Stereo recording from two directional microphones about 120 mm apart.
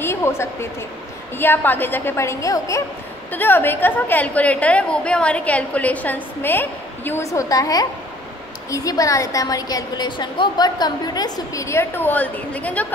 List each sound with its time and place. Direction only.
0.0 s a woman's voice: 20° left (ahead or behind)
3.3 s a woman's voice: 15° left (ahead or behind)